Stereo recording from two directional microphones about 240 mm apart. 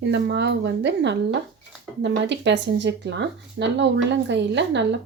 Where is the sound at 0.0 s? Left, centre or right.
Right.